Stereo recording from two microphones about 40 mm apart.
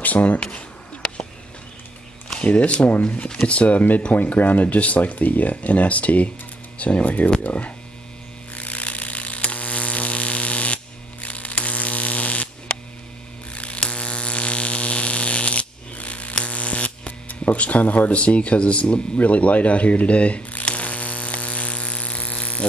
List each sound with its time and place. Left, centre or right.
0.0 s speech: left
0.4 s a sound: left
2.3 s speech: left
8.5 s hum: left
11.2 s electric shaver: left
13.6 s mains hum: left
16.4 s a sound: left